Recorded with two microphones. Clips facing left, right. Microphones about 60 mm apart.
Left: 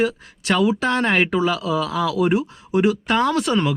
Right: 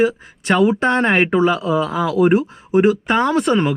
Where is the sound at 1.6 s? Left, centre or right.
Right.